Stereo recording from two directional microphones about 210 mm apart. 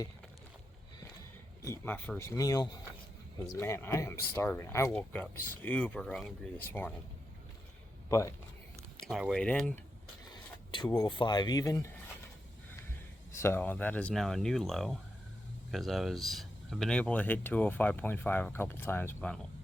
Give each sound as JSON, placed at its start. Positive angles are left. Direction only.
{"t": 1.6, "sound": "speech", "side_deg": 10}
{"t": 9.0, "sound": "speech", "side_deg": 0}
{"t": 10.7, "sound": "speech", "side_deg": 20}
{"t": 13.3, "sound": "speech", "side_deg": 10}